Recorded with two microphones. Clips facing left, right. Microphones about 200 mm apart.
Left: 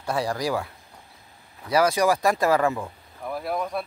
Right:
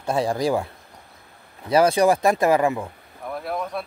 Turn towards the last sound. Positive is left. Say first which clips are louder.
# even
turn(degrees=0)  # may be behind; listen again after turning